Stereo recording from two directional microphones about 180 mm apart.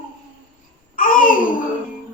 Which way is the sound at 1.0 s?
50° left (ahead or behind).